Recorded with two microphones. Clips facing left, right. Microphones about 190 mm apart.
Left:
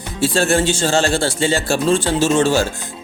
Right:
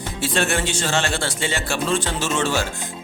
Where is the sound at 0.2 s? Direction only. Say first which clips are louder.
Left 6 dB; 30° left (ahead or behind).